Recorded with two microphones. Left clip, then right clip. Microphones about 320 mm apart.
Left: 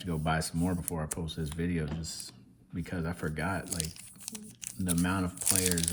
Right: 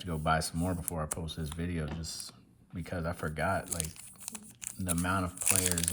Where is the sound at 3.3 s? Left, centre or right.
Centre.